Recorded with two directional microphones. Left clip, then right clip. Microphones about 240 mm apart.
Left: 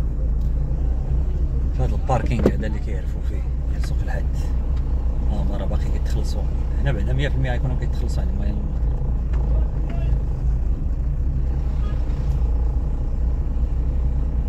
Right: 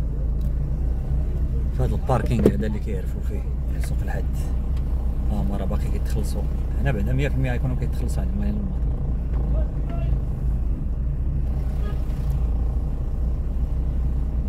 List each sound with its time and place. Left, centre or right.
1.8 s speech: right
6.8 s speech: right